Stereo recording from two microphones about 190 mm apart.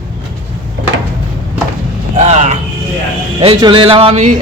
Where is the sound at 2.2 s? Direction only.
35° right (ahead or behind).